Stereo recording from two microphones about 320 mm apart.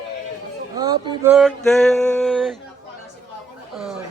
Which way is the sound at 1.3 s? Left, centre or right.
Centre.